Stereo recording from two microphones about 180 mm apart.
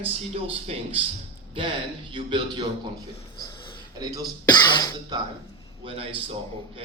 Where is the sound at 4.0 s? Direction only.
20° right (ahead or behind).